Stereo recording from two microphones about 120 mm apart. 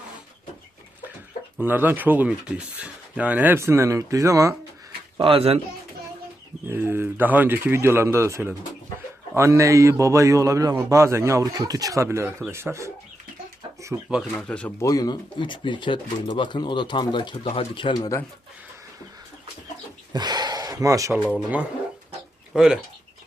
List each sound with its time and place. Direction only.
1.6 s speech: 15° right (ahead or behind)
5.1 s speech: 45° right (ahead or behind)
6.7 s a man's voice: 20° right (ahead or behind)
14.3 s speech: 10° left (ahead or behind)
14.8 s speech: 30° left (ahead or behind)
17.4 s speech: 60° left (ahead or behind); by 18.1 s 40° left (ahead or behind)
20.1 s a sound: 35° right (ahead or behind)
22.5 s speech: 5° right (ahead or behind)